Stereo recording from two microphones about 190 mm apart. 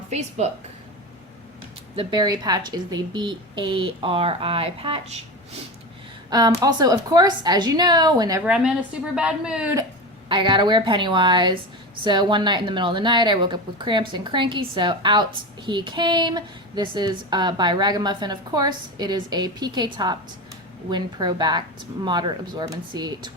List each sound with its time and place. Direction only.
0.1 s a woman's voice: 35° right (ahead or behind)
2.0 s a woman's voice: 25° right (ahead or behind)
6.6 s a woman's voice: 20° right (ahead or behind)
8.4 s speech: 5° right (ahead or behind)
10.2 s a woman's voice: 25° right (ahead or behind)